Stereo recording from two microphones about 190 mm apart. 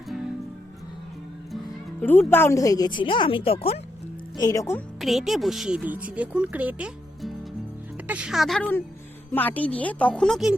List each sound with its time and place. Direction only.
2.0 s a woman's voice: 10° left (ahead or behind); by 3.8 s 30° left (ahead or behind)
4.4 s speech: 15° left (ahead or behind)
4.9 s a woman's voice: centre (ahead or behind)